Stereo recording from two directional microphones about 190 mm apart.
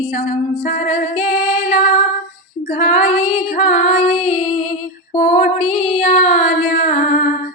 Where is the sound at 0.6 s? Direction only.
40° left (ahead or behind).